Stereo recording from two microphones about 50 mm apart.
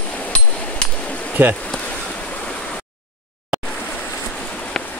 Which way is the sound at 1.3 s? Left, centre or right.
Right.